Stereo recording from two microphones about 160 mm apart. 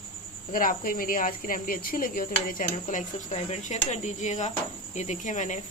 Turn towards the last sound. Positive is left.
turn(degrees=50)  # may be behind; listen again after turning